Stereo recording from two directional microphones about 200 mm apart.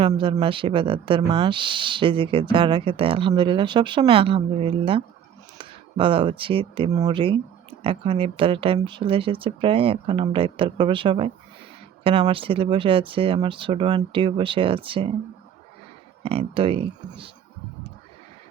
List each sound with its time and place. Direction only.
0.0 s speech: 25° right (ahead or behind)
16.2 s speech: 30° right (ahead or behind)